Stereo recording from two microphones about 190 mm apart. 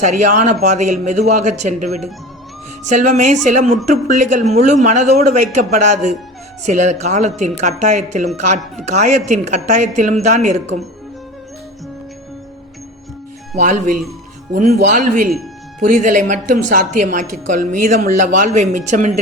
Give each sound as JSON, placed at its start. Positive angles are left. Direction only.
{"t": 0.0, "sound": "a woman's voice", "side_deg": -40}
{"t": 13.6, "sound": "a woman's voice", "side_deg": -40}